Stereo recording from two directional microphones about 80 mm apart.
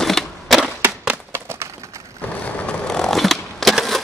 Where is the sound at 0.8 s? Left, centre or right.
Right.